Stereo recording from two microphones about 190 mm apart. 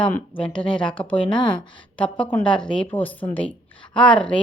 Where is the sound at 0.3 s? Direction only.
5° left (ahead or behind).